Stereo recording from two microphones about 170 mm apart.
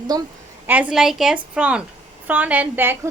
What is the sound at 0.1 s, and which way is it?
Speech, 25° right (ahead or behind).